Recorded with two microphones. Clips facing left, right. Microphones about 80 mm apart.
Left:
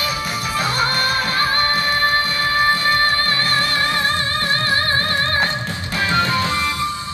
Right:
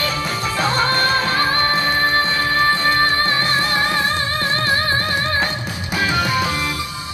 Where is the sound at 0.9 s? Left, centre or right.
Right.